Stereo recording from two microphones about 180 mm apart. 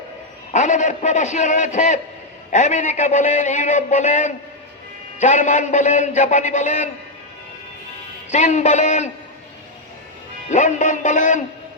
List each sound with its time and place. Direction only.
0.5 s a man's voice: 40° left (ahead or behind)
8.3 s a man's voice: 40° left (ahead or behind)
10.5 s a man's voice: 40° left (ahead or behind)